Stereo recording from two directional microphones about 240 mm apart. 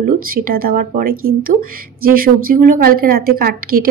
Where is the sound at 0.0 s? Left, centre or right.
Right.